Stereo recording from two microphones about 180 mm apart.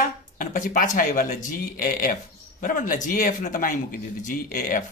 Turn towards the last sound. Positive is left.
turn(degrees=50)  # may be behind; listen again after turning